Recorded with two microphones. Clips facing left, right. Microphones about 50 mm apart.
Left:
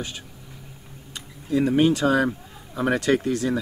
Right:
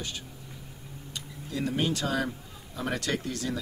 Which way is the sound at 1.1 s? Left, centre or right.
Left.